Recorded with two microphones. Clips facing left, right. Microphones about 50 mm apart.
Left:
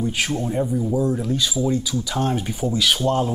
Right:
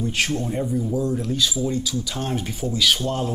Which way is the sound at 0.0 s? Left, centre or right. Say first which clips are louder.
Left 1 dB; centre.